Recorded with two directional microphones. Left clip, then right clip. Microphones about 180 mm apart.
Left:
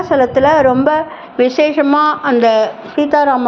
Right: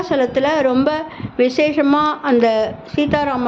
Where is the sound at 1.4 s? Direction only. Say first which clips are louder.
Left 3 dB; 10° right (ahead or behind).